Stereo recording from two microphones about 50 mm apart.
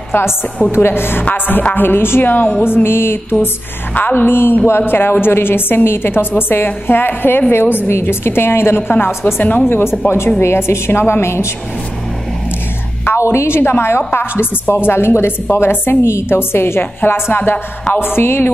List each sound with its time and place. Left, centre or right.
0.7 s a woman's voice: left
1.6 s a woman's voice: left
1.9 s a woman's voice: left
3.9 s a woman's voice: left
7.9 s a woman's voice: left
8.9 s a woman's voice: left
9.7 s a woman's voice: left
13.2 s a woman's voice: left